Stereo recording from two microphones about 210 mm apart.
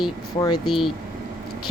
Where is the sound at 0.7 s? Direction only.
Centre (ahead or behind).